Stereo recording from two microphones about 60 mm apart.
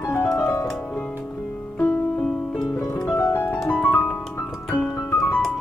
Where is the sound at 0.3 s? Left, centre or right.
Left.